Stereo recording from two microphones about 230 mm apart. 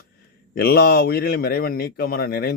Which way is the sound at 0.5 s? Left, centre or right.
Left.